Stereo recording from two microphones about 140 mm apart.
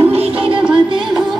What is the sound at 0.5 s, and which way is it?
Music, 5° right (ahead or behind).